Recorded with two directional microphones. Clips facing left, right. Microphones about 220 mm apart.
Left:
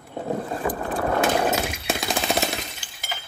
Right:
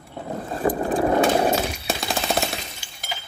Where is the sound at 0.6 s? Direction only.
35° right (ahead or behind).